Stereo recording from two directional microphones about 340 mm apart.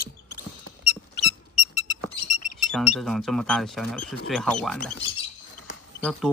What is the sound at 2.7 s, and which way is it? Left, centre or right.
Speech, centre.